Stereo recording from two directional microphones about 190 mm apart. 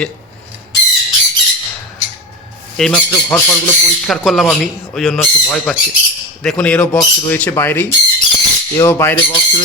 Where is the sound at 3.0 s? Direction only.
15° left (ahead or behind).